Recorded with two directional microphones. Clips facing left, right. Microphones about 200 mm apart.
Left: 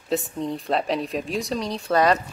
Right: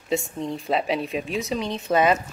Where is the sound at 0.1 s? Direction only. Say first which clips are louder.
Left 1 dB; centre (ahead or behind).